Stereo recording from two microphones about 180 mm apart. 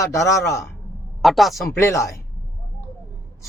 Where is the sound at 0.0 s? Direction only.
15° left (ahead or behind).